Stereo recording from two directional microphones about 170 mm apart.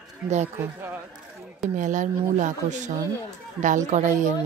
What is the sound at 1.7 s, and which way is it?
Speech, 50° right (ahead or behind).